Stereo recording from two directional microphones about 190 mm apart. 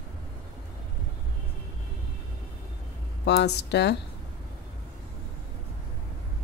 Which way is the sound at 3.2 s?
60° left (ahead or behind).